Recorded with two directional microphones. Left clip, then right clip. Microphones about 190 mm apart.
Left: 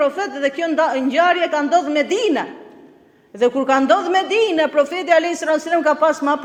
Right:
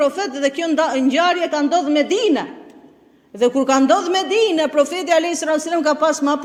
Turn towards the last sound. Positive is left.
turn(degrees=-35)  # may be behind; listen again after turning